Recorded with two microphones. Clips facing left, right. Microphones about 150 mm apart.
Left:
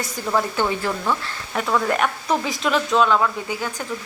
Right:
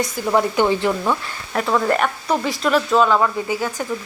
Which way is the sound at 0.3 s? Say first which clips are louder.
Right 4 dB; 15° right (ahead or behind).